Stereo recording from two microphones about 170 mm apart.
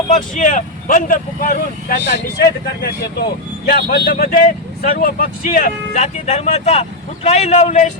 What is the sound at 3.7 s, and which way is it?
Speech, 65° left (ahead or behind).